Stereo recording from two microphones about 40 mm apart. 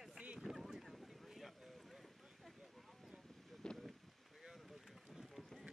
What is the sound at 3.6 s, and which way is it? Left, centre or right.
Boat, centre.